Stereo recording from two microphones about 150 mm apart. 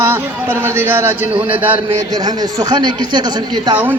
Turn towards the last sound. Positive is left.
turn(degrees=-30)  # may be behind; listen again after turning